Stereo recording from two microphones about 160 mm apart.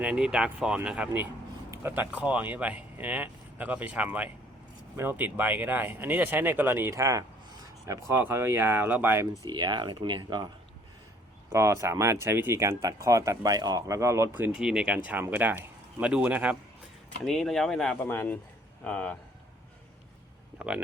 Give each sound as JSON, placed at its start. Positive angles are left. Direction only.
{"t": 0.0, "sound": "speech", "side_deg": -5}
{"t": 9.5, "sound": "speech", "side_deg": -30}
{"t": 11.4, "sound": "speech", "side_deg": -15}